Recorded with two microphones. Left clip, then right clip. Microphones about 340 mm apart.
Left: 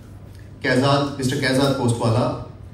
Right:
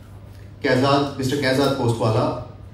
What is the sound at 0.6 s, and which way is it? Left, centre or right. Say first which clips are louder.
A man's voice: right 1 dB; left.